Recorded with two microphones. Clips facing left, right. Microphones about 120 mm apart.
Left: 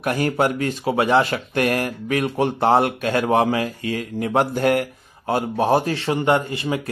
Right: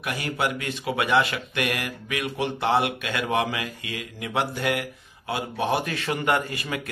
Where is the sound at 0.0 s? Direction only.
45° left (ahead or behind).